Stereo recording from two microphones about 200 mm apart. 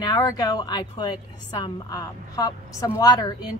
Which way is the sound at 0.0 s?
20° left (ahead or behind).